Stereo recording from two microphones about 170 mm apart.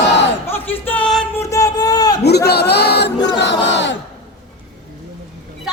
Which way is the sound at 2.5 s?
70° left (ahead or behind).